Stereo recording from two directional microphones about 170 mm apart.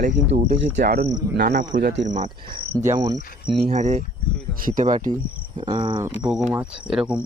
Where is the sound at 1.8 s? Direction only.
90° right.